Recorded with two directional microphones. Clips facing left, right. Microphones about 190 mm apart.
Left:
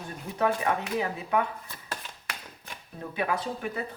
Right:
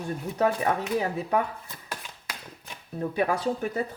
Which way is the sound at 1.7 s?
15° right (ahead or behind).